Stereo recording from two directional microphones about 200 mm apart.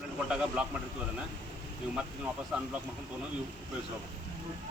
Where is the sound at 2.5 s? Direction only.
5° right (ahead or behind).